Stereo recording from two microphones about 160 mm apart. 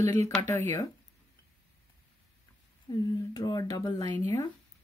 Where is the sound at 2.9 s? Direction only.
25° left (ahead or behind).